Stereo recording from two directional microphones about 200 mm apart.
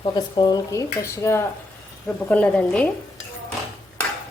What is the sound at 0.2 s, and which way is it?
Speech, 20° left (ahead or behind).